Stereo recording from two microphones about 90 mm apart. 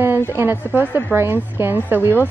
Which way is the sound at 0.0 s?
25° right (ahead or behind).